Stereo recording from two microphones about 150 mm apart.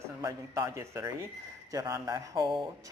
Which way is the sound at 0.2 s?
20° right (ahead or behind).